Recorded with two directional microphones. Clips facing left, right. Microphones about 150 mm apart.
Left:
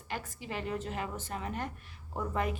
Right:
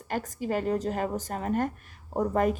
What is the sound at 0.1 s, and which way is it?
A woman's voice, 45° right (ahead or behind).